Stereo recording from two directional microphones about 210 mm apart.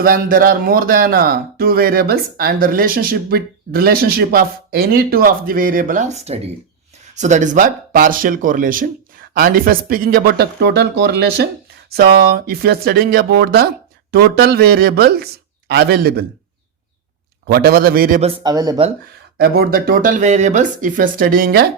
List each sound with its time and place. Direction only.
0.0 s speech: 45° right (ahead or behind)
17.4 s speech: 50° right (ahead or behind)
18.2 s speech: 20° right (ahead or behind)
19.4 s speech: 45° right (ahead or behind)